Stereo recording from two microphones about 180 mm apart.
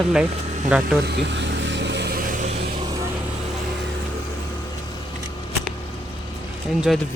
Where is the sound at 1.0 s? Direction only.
75° right (ahead or behind).